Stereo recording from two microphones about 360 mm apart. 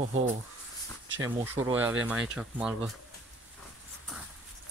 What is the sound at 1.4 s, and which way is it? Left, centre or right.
Speech, centre.